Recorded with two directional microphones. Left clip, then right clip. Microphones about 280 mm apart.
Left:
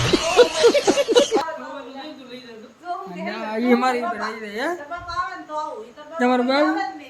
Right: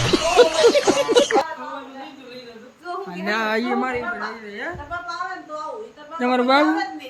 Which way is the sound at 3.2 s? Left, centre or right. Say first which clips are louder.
Right 7 dB; centre.